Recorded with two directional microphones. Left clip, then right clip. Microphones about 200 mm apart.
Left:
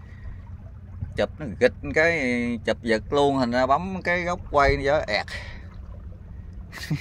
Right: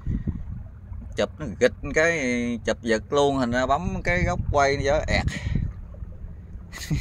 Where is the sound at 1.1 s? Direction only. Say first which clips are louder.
Even; 10° right (ahead or behind).